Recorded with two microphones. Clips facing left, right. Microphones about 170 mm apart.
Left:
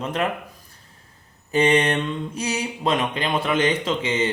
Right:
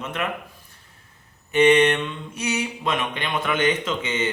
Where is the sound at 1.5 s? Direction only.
35° left (ahead or behind).